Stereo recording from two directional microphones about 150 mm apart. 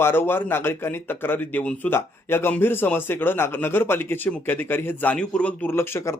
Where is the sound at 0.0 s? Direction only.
15° left (ahead or behind).